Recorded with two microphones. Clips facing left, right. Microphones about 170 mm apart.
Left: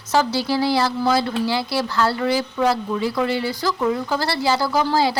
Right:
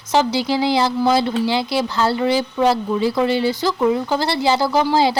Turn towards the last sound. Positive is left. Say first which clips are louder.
# right 3 dB
turn(degrees=-25)  # may be behind; listen again after turning